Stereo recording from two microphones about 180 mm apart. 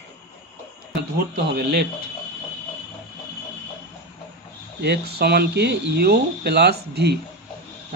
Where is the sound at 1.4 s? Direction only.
65° right (ahead or behind).